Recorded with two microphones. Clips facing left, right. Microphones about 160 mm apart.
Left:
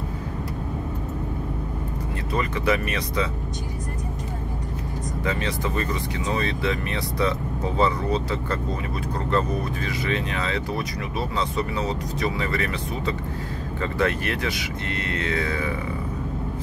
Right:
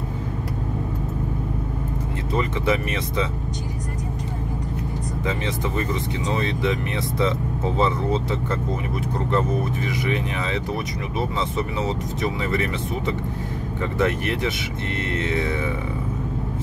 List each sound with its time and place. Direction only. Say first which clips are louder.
2.3 s speech: right 1 dB; 20° right (ahead or behind)
5.2 s speech: even; 20° right (ahead or behind)